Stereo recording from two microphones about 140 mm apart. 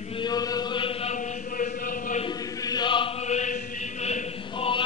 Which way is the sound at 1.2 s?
70° left (ahead or behind).